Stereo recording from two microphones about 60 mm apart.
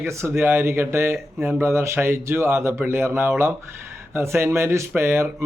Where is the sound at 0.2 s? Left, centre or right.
Right.